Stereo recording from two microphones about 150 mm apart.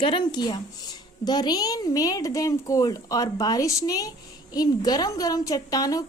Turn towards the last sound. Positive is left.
turn(degrees=25)  # may be behind; listen again after turning